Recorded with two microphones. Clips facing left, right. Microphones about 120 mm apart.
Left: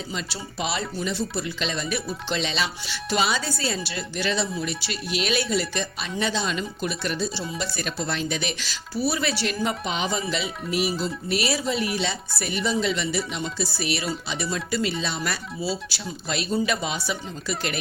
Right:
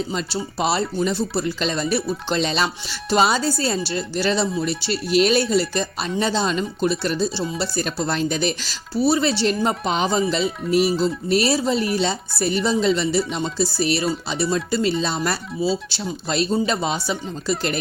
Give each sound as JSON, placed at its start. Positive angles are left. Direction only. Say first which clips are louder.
{"t": 0.6, "sound": "speech", "louder": "right 7 dB", "side_deg": -40}
{"t": 15.6, "sound": "speech", "louder": "right 7 dB", "side_deg": -25}